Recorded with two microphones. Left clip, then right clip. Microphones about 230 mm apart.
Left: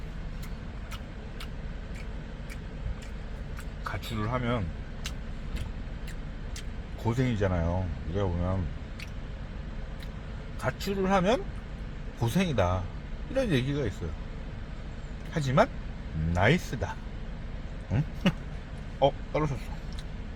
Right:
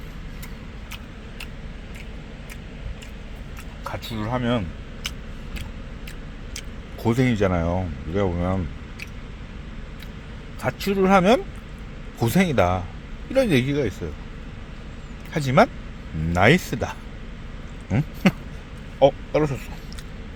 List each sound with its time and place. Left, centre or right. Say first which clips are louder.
4.0 s speech: right 6 dB; right
7.0 s speech: right 8 dB; right
10.6 s speech: right 8 dB; right
15.3 s speech: right 7 dB; right
17.9 s a sound: right 8 dB; right
18.9 s speech: right 8 dB; right